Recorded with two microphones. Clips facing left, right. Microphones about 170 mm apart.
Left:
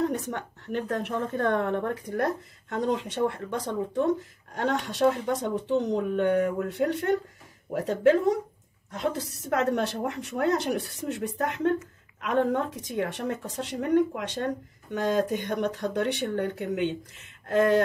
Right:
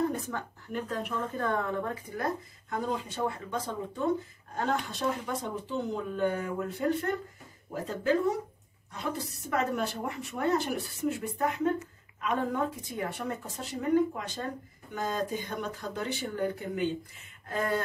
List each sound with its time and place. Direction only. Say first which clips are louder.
0.1 s a woman's voice: left 4 dB; 75° left (ahead or behind)
12.2 s a woman's voice: left 5 dB; 90° left